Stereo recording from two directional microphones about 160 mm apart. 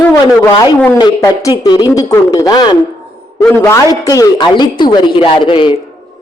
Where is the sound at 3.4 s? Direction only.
15° left (ahead or behind); by 5.8 s 30° left (ahead or behind).